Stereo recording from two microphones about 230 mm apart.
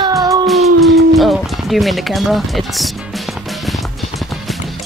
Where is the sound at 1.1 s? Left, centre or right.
Centre.